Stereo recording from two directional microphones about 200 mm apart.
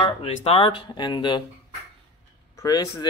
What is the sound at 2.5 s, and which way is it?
Speech, 20° left (ahead or behind).